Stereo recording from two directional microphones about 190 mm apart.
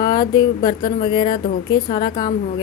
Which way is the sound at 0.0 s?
20° left (ahead or behind).